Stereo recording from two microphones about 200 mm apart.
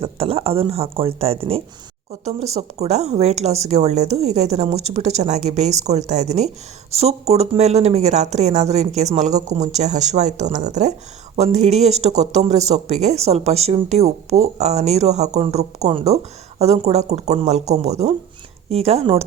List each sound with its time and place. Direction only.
0.0 s speech: 30° right (ahead or behind)